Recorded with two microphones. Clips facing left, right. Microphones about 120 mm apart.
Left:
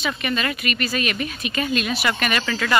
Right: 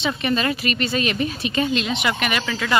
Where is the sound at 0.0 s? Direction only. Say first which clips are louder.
Right 3 dB; 30° right (ahead or behind); by 2.8 s 10° right (ahead or behind).